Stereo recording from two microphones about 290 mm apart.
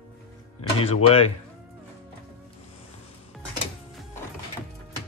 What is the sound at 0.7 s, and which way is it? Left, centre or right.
Speech, centre.